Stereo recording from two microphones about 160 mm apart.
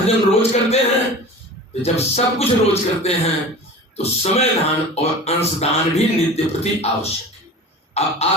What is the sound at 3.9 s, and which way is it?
Speech, 40° left (ahead or behind).